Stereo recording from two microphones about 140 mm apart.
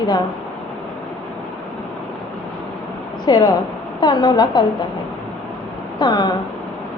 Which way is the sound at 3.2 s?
25° left (ahead or behind).